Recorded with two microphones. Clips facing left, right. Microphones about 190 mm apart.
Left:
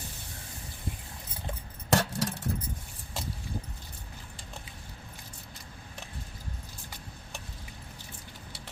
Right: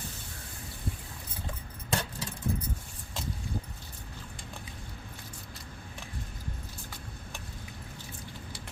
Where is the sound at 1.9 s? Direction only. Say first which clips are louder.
Left 7 dB; 80° left.